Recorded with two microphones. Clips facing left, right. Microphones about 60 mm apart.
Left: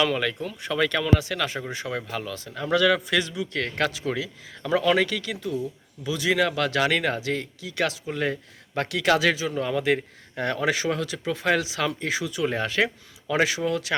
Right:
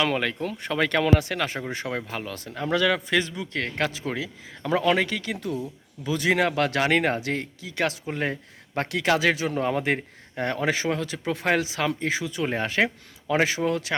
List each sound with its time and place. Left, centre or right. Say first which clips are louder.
0.0 s speech: left 1 dB; right
0.4 s speech: even; right
1.4 s a man's voice: even; right
5.4 s a man's voice: left 1 dB; right
9.3 s speech: right 1 dB; right
9.6 s speech: left 2 dB; right
10.3 s a man's voice: even; right